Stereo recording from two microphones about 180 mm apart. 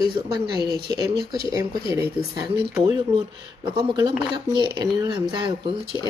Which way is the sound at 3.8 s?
25° right (ahead or behind).